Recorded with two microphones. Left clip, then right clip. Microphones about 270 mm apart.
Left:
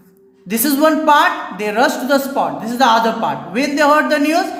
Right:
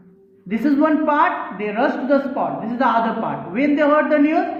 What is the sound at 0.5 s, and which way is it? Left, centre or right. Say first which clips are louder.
A man's voice: left 3 dB; left.